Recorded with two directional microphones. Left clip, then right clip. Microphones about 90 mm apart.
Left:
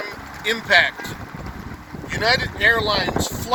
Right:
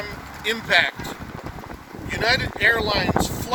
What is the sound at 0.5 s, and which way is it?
Speech, centre (ahead or behind).